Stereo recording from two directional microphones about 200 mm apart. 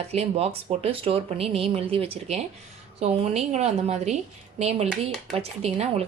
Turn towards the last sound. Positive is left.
turn(degrees=-30)  # may be behind; listen again after turning